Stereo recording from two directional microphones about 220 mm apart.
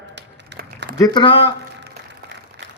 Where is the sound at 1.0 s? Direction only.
20° left (ahead or behind).